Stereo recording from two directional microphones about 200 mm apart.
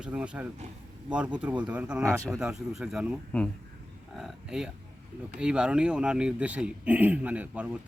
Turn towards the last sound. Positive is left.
turn(degrees=-5)  # may be behind; listen again after turning